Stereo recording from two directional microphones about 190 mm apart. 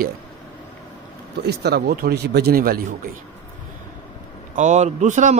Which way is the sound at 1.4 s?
55° right (ahead or behind).